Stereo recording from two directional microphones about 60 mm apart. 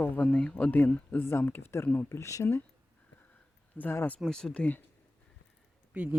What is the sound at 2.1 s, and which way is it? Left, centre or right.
Speech, left.